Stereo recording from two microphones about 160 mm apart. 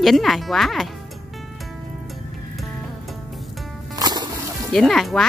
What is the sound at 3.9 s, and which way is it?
Music, 25° right (ahead or behind).